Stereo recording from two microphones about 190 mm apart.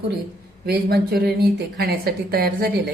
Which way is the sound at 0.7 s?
55° right (ahead or behind).